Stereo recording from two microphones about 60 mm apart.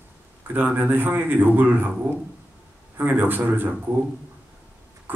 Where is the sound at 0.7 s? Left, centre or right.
Right.